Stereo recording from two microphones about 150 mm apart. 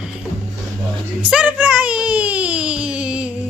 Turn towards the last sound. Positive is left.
turn(degrees=-5)  # may be behind; listen again after turning